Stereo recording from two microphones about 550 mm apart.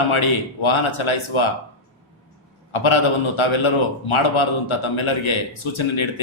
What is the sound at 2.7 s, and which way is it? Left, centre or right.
A man's voice, left.